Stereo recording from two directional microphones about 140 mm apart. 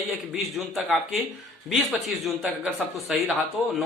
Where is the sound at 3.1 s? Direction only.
5° right (ahead or behind).